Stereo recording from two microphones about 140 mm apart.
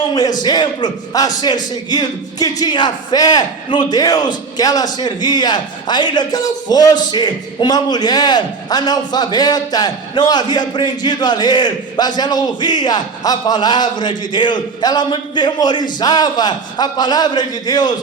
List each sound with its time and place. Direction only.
0.1 s a man's voice: 30° left (ahead or behind)